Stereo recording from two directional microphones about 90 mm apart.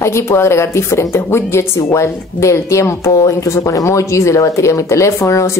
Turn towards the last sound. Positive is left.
turn(degrees=35)  # may be behind; listen again after turning